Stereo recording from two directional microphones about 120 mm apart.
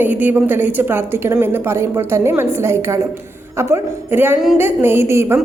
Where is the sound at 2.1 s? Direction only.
20° right (ahead or behind).